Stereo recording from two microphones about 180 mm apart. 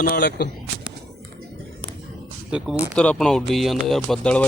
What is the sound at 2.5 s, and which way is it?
Speech, 5° right (ahead or behind).